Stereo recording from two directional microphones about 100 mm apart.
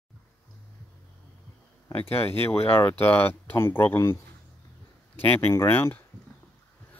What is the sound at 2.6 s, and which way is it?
Speech, 20° left (ahead or behind).